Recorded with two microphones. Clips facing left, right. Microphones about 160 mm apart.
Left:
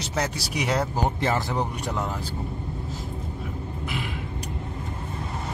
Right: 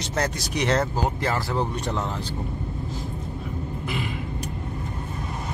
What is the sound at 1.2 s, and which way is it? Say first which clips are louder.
Speech: even; 20° left (ahead or behind).